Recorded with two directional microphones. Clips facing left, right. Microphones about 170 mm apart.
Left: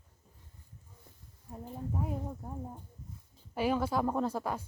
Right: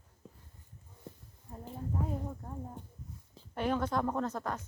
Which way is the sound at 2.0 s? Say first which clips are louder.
Left 1 dB; 10° left (ahead or behind).